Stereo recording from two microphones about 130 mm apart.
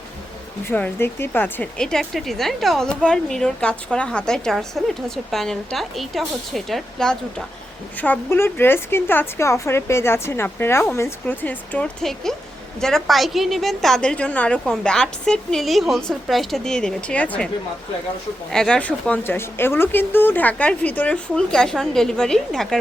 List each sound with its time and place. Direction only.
0.6 s a woman's voice: 15° left (ahead or behind)
1.8 s speech: 5° left (ahead or behind)
8.0 s a woman's voice: 15° left (ahead or behind)
18.5 s a woman's voice: 5° left (ahead or behind)